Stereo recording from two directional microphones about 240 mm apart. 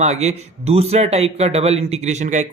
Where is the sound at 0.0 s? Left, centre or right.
Right.